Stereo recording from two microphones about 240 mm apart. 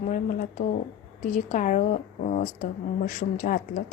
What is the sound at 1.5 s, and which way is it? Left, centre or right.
Speech, left.